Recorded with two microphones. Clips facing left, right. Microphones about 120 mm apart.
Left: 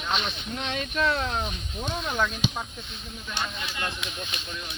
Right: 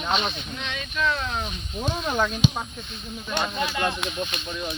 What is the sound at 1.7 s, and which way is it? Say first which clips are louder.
Speech: right 4 dB; 10° right (ahead or behind).